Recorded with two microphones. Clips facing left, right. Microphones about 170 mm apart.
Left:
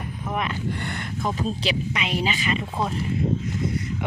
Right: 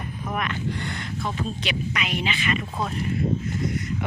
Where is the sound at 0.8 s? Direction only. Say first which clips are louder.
Left 1 dB; 55° left (ahead or behind); by 1.7 s 40° left (ahead or behind).